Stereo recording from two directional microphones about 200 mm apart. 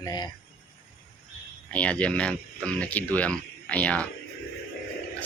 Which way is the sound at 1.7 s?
5° left (ahead or behind).